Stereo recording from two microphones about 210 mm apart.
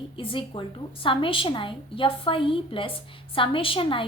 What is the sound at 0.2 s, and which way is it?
A woman's voice, 25° left (ahead or behind).